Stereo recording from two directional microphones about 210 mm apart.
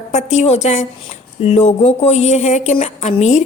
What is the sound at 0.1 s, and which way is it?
A woman's voice, 30° left (ahead or behind).